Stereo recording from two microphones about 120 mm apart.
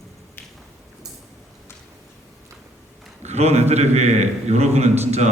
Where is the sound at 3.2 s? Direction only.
65° right (ahead or behind).